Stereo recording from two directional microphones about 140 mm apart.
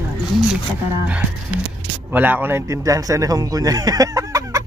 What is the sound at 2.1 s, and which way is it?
Speech, 15° right (ahead or behind).